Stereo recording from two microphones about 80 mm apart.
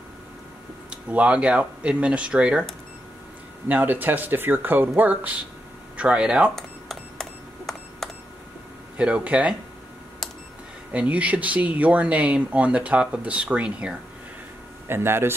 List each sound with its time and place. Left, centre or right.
0.8 s speech: centre
3.6 s speech: right
6.5 s cash register: centre
8.9 s speech: centre
10.9 s speech: centre
14.9 s speech: right